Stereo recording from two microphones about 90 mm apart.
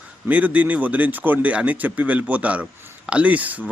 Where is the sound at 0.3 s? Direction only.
15° right (ahead or behind).